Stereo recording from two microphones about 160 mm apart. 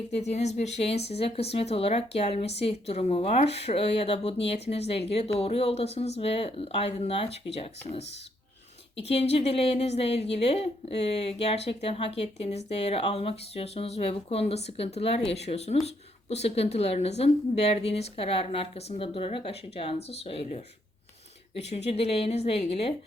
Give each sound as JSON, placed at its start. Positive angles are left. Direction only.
{"t": 0.1, "sound": "speech", "side_deg": 45}
{"t": 9.0, "sound": "speech", "side_deg": 40}